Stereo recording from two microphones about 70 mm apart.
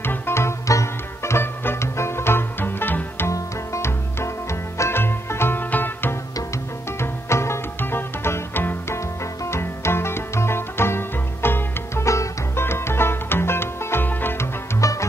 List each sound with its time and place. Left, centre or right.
0.0 s music: left
3.3 s music: left
7.0 s music: left
14.8 s music: left